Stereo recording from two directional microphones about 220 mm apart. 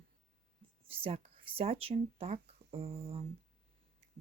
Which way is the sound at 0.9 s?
25° right (ahead or behind).